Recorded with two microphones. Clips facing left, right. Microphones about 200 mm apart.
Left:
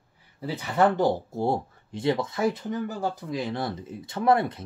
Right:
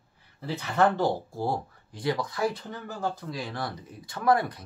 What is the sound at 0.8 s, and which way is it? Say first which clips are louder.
Speech: left 2 dB; 20° left (ahead or behind).